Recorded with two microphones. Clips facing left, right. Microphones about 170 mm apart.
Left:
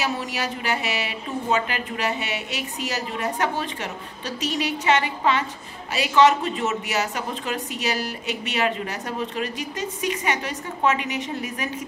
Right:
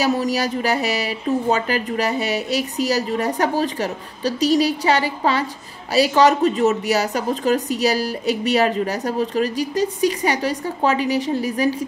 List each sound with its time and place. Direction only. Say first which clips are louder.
0.0 s speech: right 8 dB; 40° right (ahead or behind)